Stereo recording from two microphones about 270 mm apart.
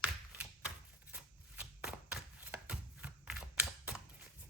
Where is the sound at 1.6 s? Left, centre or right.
Centre.